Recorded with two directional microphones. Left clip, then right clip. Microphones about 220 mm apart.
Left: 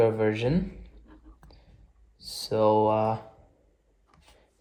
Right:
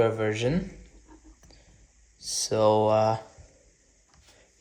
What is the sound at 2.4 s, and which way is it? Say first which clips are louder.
Speech: even; 15° right (ahead or behind).